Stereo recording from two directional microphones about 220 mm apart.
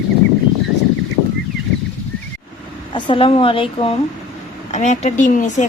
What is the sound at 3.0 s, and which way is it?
A woman's voice, 25° left (ahead or behind).